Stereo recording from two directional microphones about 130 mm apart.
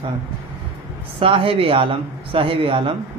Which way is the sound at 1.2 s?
45° right (ahead or behind).